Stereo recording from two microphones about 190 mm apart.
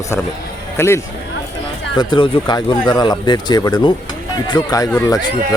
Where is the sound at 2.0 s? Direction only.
25° left (ahead or behind).